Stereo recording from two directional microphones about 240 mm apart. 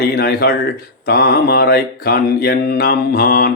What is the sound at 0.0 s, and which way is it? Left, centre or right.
Speech, left.